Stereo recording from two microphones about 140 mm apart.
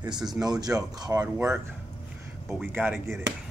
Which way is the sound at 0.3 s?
30° right (ahead or behind).